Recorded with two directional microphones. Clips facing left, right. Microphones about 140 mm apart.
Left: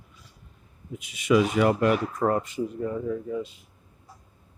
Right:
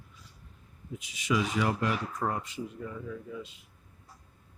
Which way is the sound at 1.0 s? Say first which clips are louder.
Left 9 dB; 60° left (ahead or behind).